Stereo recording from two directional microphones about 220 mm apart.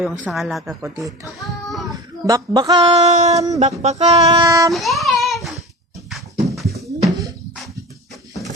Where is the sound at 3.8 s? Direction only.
30° right (ahead or behind).